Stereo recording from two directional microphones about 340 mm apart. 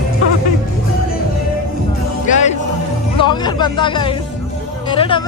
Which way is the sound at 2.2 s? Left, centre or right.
Left.